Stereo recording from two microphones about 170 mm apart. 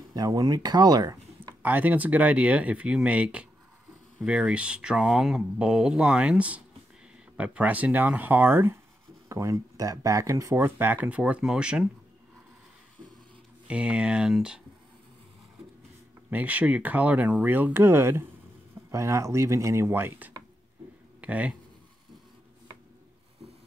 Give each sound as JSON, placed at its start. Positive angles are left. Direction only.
{"t": 0.1, "sound": "speech", "side_deg": -20}
{"t": 1.6, "sound": "speech", "side_deg": -10}
{"t": 13.7, "sound": "speech", "side_deg": -5}
{"t": 16.3, "sound": "speech", "side_deg": -10}